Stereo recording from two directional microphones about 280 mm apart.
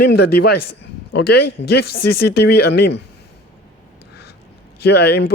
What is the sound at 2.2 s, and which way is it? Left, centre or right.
Speech, left.